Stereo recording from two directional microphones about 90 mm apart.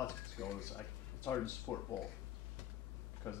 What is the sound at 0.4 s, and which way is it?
Speech, 5° left (ahead or behind).